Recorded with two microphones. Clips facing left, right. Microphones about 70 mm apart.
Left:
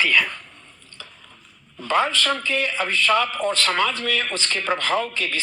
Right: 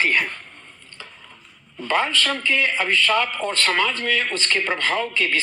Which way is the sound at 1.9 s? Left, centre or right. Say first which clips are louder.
Left 1 dB; left.